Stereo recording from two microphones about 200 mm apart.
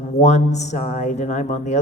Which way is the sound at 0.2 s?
35° left (ahead or behind).